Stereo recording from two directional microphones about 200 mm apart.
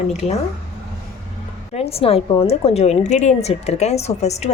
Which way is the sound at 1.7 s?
30° left (ahead or behind).